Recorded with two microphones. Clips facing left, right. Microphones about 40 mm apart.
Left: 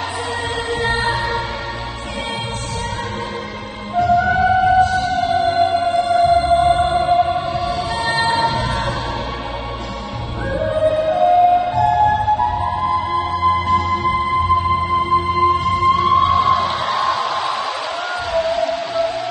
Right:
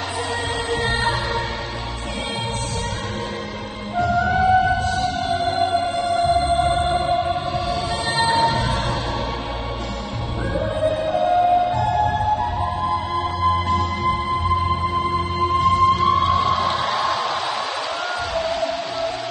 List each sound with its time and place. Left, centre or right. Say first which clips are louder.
0.7 s music: left 3 dB; centre
3.9 s music: left 4 dB; centre
10.5 s music: left 5 dB; centre